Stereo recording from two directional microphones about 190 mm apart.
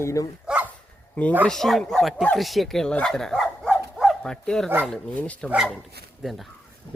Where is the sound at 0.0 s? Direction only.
15° left (ahead or behind).